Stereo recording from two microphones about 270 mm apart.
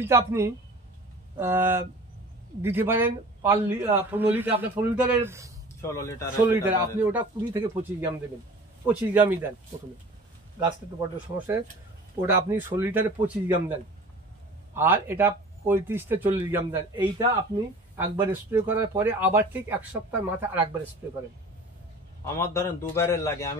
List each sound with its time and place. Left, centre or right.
0.0 s speech: centre
5.8 s a man's voice: centre
6.4 s speech: centre
10.6 s speech: centre
22.2 s a man's voice: centre